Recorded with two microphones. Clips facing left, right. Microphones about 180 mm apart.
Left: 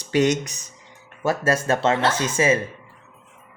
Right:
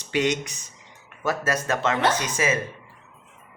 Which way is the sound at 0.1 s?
40° left (ahead or behind).